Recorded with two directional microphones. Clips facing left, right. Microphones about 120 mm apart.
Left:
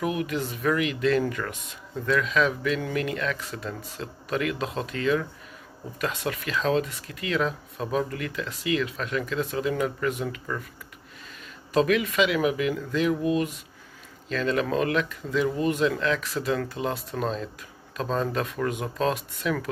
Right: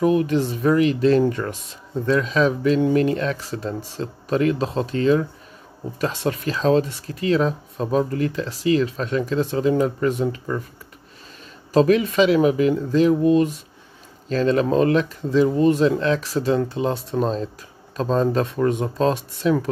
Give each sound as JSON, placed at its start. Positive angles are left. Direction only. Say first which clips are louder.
{"t": 0.0, "sound": "speech", "louder": "right 9 dB", "side_deg": -35}
{"t": 11.7, "sound": "speech", "louder": "right 6 dB", "side_deg": -35}